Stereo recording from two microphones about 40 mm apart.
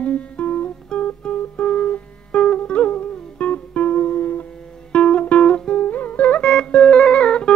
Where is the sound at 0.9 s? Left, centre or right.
Centre.